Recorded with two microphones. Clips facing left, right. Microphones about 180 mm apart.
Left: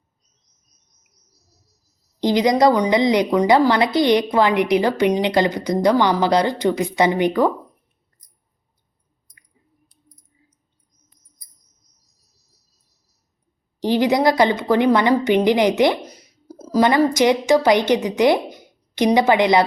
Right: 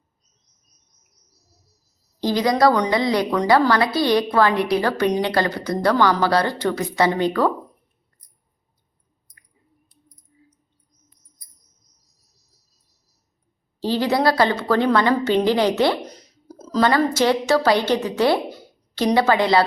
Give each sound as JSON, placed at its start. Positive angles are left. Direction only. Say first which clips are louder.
{"t": 2.2, "sound": "a woman's voice", "louder": "left 2 dB", "side_deg": 20}
{"t": 13.7, "sound": "a woman's voice", "louder": "left 3 dB", "side_deg": 15}